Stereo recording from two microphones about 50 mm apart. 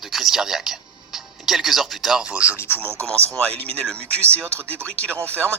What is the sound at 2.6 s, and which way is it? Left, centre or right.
Speech, left.